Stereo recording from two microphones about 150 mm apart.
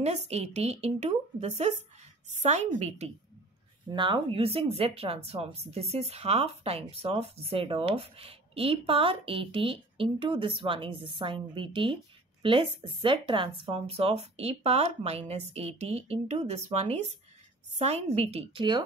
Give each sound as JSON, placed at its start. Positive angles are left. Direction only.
{"t": 0.0, "sound": "a woman's voice", "side_deg": -45}
{"t": 3.9, "sound": "a woman's voice", "side_deg": -30}